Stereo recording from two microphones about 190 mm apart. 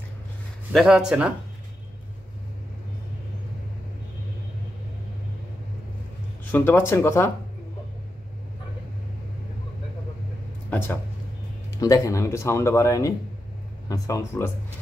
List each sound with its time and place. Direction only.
0.7 s speech: 5° right (ahead or behind)
6.4 s speech: 10° left (ahead or behind)
10.7 s speech: 10° left (ahead or behind)